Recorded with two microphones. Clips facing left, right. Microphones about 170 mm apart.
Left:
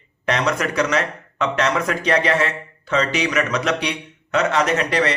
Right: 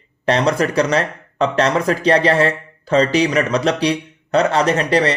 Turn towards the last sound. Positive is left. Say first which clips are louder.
# right 4 dB
turn(degrees=-30)  # may be behind; listen again after turning